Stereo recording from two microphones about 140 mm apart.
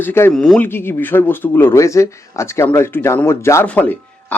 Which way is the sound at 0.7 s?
15° left (ahead or behind).